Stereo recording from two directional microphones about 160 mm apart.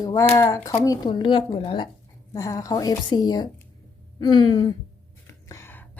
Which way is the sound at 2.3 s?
20° left (ahead or behind).